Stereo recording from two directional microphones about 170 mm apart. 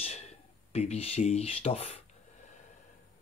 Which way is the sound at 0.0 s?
40° left (ahead or behind).